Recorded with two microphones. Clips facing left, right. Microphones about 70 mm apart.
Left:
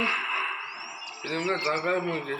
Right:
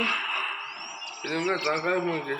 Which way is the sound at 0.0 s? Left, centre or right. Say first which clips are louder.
Left 1 dB; left.